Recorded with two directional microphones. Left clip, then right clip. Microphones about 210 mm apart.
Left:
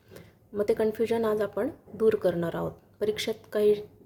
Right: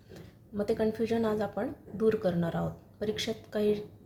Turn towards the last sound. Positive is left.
turn(degrees=30)  # may be behind; listen again after turning